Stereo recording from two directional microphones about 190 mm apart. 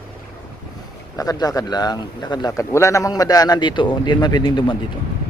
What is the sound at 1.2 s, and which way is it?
A man's voice, 20° left (ahead or behind).